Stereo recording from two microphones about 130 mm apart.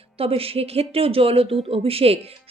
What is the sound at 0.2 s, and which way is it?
A woman's voice, 45° right (ahead or behind).